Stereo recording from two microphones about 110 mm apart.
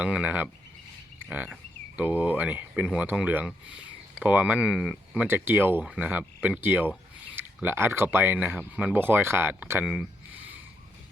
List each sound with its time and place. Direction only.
0.0 s speech: 10° right (ahead or behind)
1.2 s a sound: 15° right (ahead or behind)
2.0 s speech: 15° right (ahead or behind)
5.2 s speech: 20° right (ahead or behind)
5.8 s speech: 10° right (ahead or behind)
9.8 s a sound: 5° right (ahead or behind)